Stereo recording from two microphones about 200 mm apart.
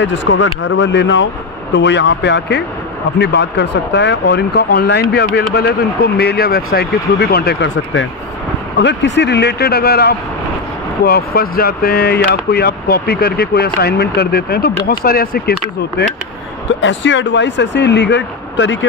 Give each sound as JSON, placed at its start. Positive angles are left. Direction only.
{"t": 0.0, "sound": "speech", "side_deg": 65}
{"t": 16.8, "sound": "speech", "side_deg": 65}